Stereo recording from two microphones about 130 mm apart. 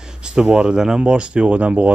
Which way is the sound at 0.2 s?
5° right (ahead or behind).